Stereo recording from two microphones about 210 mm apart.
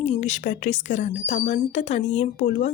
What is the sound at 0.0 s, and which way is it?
Speech, 35° left (ahead or behind).